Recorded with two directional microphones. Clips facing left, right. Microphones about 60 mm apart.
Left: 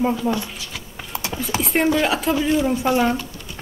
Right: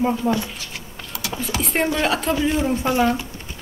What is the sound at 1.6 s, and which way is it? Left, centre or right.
A woman's voice, centre.